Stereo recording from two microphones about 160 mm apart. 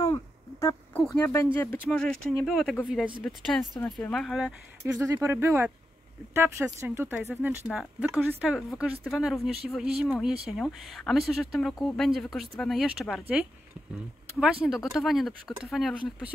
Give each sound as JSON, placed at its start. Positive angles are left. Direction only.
{"t": 0.0, "sound": "a sound", "side_deg": 20}
{"t": 1.0, "sound": "speech", "side_deg": 10}
{"t": 4.9, "sound": "a woman's voice", "side_deg": -20}